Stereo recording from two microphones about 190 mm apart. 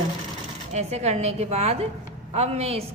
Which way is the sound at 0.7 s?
35° right (ahead or behind).